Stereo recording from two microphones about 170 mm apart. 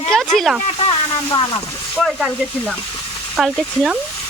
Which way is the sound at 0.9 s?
30° left (ahead or behind).